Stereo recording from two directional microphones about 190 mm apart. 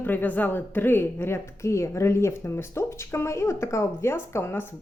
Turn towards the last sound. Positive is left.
turn(degrees=10)  # may be behind; listen again after turning